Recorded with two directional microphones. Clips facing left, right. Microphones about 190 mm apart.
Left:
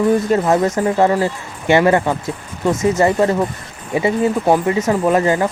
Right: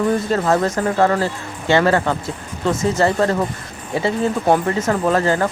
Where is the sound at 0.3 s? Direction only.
15° left (ahead or behind).